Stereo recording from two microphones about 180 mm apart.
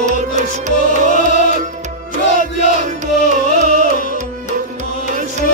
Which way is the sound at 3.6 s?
40° right (ahead or behind).